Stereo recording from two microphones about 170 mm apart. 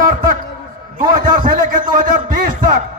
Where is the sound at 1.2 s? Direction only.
50° right (ahead or behind).